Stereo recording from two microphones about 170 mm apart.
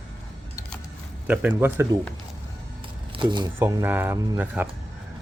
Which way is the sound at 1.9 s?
25° right (ahead or behind).